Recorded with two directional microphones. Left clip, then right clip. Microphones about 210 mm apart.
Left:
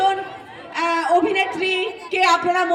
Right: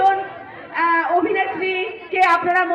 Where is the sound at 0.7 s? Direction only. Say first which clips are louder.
Right 1 dB; 40° left (ahead or behind).